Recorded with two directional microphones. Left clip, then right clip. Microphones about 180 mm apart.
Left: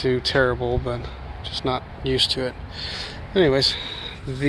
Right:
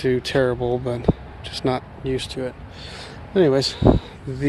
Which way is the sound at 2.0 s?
15° right (ahead or behind).